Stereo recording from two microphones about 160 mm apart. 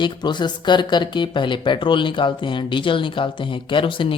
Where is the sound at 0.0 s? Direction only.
30° left (ahead or behind).